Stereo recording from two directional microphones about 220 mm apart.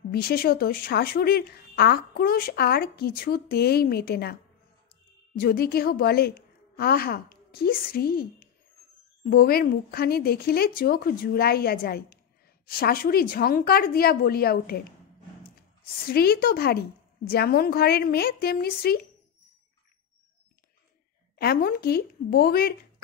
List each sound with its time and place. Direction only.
0.1 s speech: 45° left (ahead or behind)
5.4 s a woman's voice: 45° left (ahead or behind)
21.4 s speech: 45° left (ahead or behind)